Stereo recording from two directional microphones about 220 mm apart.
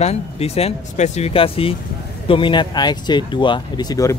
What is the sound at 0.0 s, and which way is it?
Speech, 30° left (ahead or behind).